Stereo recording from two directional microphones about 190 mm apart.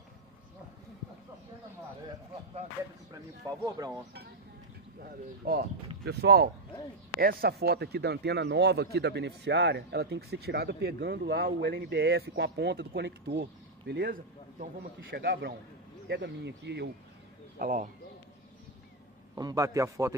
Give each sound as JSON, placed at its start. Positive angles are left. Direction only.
{"t": 3.6, "sound": "speech", "side_deg": -20}
{"t": 5.0, "sound": "a man's voice", "side_deg": -55}
{"t": 17.6, "sound": "speech", "side_deg": -45}
{"t": 19.3, "sound": "a man's voice", "side_deg": -20}